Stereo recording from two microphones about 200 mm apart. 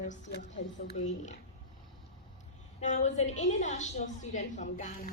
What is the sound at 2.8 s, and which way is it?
A woman's voice, 35° left (ahead or behind).